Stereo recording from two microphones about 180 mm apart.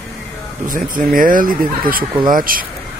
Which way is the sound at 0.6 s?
50° right (ahead or behind).